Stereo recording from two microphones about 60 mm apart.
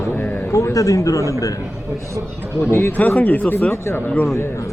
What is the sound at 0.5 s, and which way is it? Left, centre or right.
Speech, left.